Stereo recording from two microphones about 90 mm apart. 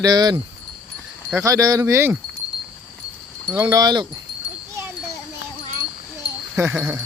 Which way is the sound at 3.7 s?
50° right (ahead or behind).